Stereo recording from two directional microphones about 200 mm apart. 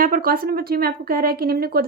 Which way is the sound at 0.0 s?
45° right (ahead or behind).